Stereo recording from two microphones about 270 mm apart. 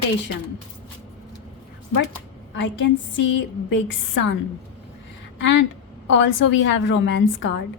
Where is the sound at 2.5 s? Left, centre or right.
Left.